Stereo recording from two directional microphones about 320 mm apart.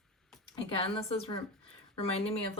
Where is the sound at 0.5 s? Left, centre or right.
Centre.